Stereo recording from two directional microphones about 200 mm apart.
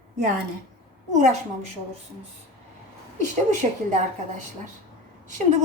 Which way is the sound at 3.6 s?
35° right (ahead or behind).